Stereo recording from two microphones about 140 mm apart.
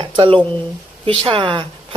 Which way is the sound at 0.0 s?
40° right (ahead or behind).